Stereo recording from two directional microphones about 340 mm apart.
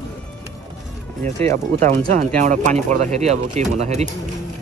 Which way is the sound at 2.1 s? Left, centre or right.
Right.